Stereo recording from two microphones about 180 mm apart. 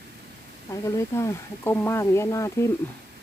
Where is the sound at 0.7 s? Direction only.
15° left (ahead or behind).